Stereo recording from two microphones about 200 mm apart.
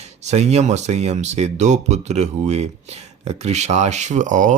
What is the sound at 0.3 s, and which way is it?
Speech, 35° right (ahead or behind).